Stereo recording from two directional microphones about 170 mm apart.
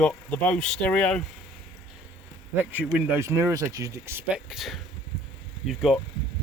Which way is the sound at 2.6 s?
10° right (ahead or behind).